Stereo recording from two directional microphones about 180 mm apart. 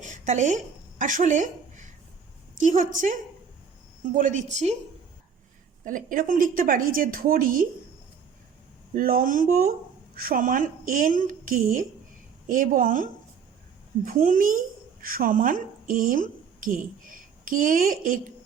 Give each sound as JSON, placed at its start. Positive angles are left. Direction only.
{"t": 0.0, "sound": "a sound", "side_deg": -40}
{"t": 2.6, "sound": "a woman's voice", "side_deg": -45}
{"t": 5.8, "sound": "a woman's voice", "side_deg": -45}
{"t": 9.0, "sound": "a woman's voice", "side_deg": -55}